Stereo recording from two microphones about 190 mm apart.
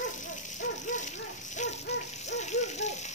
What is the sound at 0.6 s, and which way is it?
Dog, 40° left (ahead or behind).